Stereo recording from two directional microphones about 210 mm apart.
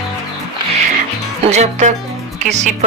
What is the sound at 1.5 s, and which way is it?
Speech, 30° right (ahead or behind).